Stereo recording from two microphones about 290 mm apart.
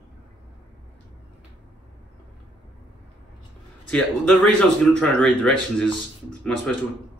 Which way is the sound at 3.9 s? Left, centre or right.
Centre.